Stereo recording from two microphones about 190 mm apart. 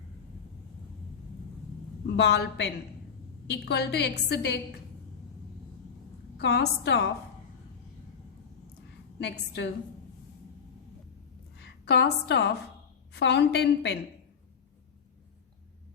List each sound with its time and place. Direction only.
2.1 s a woman's voice: 60° left (ahead or behind)
6.3 s a woman's voice: 60° left (ahead or behind)
9.1 s a woman's voice: 60° left (ahead or behind)
11.5 s a woman's voice: 60° left (ahead or behind)